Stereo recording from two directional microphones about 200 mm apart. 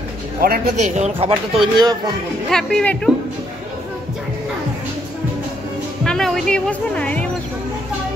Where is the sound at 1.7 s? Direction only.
20° right (ahead or behind).